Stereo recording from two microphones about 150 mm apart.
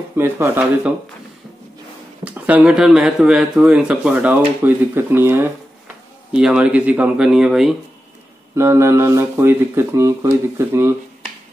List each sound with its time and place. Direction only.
0.1 s speech: 15° right (ahead or behind)
2.2 s speech: 10° right (ahead or behind)
8.5 s speech: 20° right (ahead or behind)